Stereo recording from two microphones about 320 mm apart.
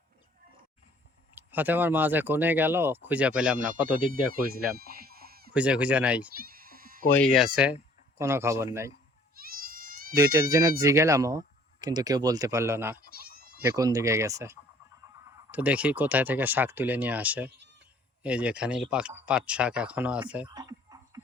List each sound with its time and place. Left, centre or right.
1.4 s speech: centre
3.9 s speech: right
4.8 s chicken: right
5.5 s speech: centre
6.3 s a sound: right
7.1 s speech: centre
9.4 s goat: right
10.2 s speech: centre
13.1 s goat: right
13.6 s speech: centre